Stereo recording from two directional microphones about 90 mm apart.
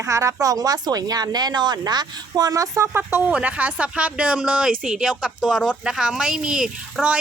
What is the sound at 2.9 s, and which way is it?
Speech, 25° right (ahead or behind).